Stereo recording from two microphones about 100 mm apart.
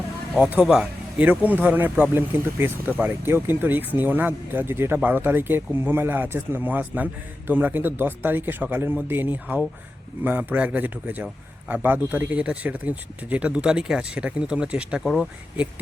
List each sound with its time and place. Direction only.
0.3 s a man's voice: 10° right (ahead or behind)
15.0 s speech: centre (ahead or behind)